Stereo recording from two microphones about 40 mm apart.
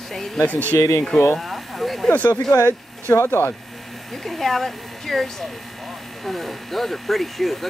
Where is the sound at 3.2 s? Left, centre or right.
Left.